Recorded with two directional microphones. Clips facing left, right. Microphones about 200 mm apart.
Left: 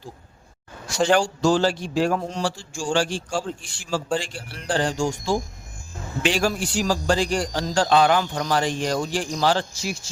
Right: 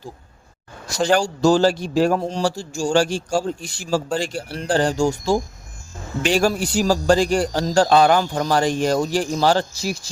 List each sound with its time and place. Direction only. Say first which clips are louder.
1.1 s a man's voice: right 4 dB; 40° right (ahead or behind)